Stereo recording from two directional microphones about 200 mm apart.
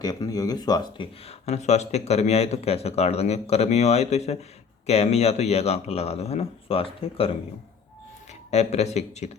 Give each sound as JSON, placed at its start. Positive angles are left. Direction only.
{"t": 0.0, "sound": "speech", "side_deg": 20}
{"t": 1.3, "sound": "speech", "side_deg": 35}
{"t": 8.4, "sound": "speech", "side_deg": 35}